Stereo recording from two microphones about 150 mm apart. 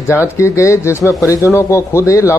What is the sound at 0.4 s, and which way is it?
A man's voice, 20° left (ahead or behind).